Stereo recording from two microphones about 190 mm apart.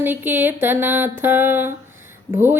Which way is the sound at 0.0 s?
10° right (ahead or behind).